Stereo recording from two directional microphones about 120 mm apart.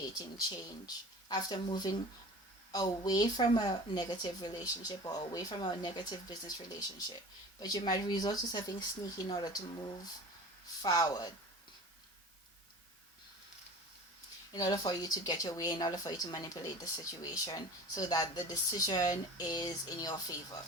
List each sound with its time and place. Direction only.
0.0 s speech: 35° left (ahead or behind)
10.8 s speech: 30° left (ahead or behind)
14.5 s speech: 35° left (ahead or behind)